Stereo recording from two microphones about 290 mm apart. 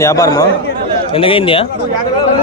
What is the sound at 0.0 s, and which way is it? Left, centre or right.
A man's voice, centre.